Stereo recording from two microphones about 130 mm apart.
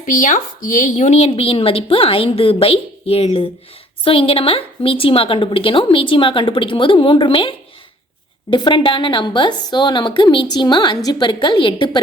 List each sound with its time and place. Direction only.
0.0 s a woman's voice: 85° left; by 12.0 s 40° left (ahead or behind)